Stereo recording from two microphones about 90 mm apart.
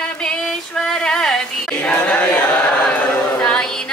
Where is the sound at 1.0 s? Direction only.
10° left (ahead or behind).